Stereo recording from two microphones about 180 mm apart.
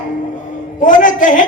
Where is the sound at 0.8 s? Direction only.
45° left (ahead or behind).